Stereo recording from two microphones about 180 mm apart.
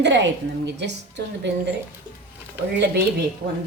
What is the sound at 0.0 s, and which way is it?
Speech, 80° right.